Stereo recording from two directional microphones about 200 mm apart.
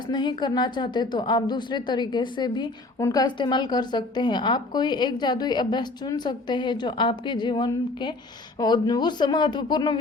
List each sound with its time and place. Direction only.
0.1 s a woman's voice: 20° left (ahead or behind)